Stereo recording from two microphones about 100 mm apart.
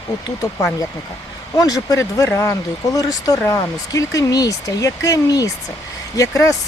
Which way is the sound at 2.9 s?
40° left (ahead or behind).